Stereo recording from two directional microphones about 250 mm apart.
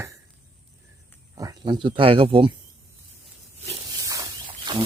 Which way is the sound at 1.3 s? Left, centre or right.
Centre.